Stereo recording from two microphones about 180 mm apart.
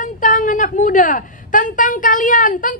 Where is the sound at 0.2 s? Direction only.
45° left (ahead or behind).